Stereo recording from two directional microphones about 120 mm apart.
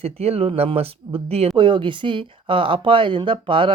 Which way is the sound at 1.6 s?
40° right (ahead or behind).